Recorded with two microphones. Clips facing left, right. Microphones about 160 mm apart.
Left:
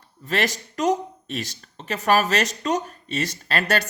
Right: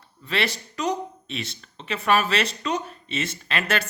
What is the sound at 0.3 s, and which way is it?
Speech, 45° left (ahead or behind).